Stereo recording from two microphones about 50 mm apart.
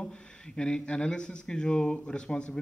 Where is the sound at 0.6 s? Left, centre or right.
Centre.